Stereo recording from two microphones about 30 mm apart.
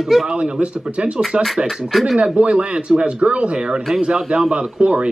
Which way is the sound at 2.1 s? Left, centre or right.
Right.